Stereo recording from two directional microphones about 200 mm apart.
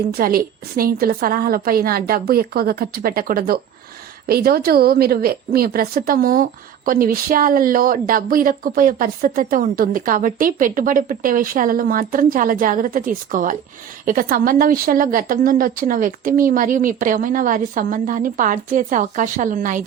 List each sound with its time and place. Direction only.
0.1 s a woman's voice: 50° right (ahead or behind)